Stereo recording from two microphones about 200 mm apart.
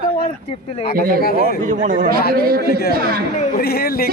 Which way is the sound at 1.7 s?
40° right (ahead or behind).